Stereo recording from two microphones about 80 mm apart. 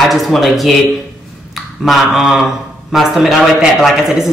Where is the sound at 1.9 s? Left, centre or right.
Centre.